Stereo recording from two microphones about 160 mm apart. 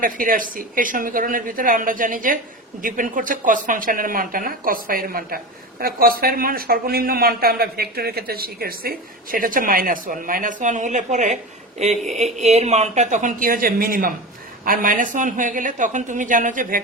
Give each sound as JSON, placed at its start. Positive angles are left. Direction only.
{"t": 0.0, "sound": "a man's voice", "side_deg": -60}